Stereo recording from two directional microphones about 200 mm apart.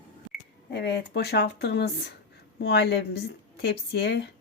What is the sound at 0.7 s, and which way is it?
A woman's voice, 55° left (ahead or behind).